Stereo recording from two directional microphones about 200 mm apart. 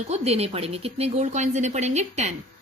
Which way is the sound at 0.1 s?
30° right (ahead or behind).